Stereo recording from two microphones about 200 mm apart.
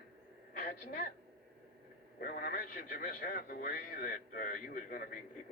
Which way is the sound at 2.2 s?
45° left (ahead or behind).